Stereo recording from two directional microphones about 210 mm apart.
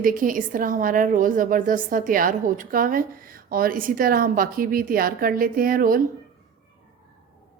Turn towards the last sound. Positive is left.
turn(degrees=-40)  # may be behind; listen again after turning